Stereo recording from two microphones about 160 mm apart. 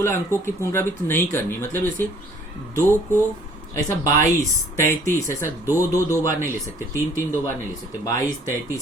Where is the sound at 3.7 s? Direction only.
20° left (ahead or behind).